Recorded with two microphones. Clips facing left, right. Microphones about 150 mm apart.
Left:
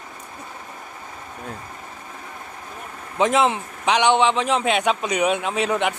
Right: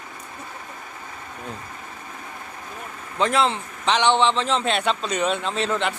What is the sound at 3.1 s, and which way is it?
A man's voice, 20° left (ahead or behind).